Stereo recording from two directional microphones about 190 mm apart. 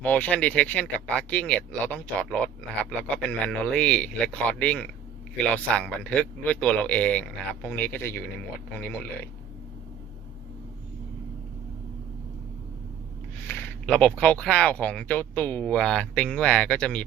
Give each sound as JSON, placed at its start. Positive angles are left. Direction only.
{"t": 0.0, "sound": "speech", "side_deg": 5}
{"t": 13.5, "sound": "speech", "side_deg": 10}